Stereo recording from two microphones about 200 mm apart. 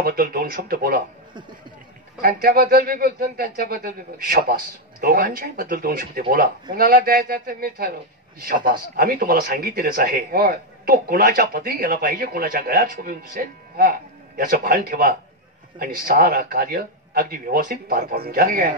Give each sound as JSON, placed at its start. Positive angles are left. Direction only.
{"t": 0.0, "sound": "speech", "side_deg": -50}
{"t": 2.2, "sound": "speech", "side_deg": -50}